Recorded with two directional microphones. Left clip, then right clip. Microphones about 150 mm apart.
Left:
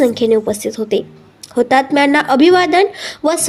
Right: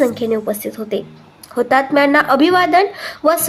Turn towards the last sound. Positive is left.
turn(degrees=15)  # may be behind; listen again after turning